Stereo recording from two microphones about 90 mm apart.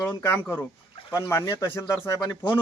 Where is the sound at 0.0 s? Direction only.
35° left (ahead or behind).